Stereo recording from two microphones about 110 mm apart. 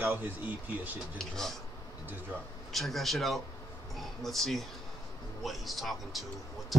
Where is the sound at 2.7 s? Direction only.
Centre (ahead or behind).